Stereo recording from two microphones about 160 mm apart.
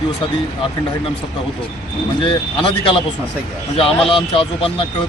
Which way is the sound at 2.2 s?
30° left (ahead or behind).